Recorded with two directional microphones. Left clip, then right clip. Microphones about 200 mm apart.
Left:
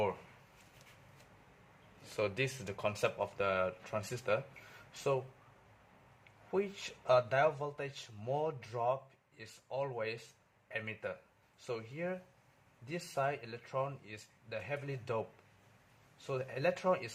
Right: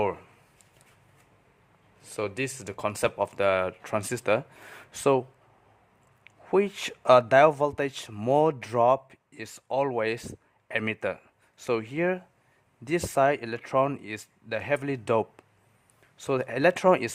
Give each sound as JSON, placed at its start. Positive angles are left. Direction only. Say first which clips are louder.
{"t": 2.1, "sound": "speech", "louder": "right 5 dB", "side_deg": -30}
{"t": 6.5, "sound": "speech", "louder": "right 12 dB", "side_deg": -55}